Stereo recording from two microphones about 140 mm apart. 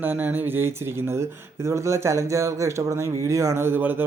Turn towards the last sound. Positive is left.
turn(degrees=-15)  # may be behind; listen again after turning